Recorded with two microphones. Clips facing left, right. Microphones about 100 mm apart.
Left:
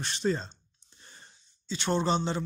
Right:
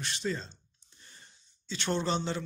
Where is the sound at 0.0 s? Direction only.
35° left (ahead or behind).